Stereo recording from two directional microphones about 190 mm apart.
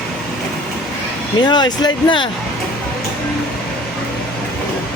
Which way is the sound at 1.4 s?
25° left (ahead or behind).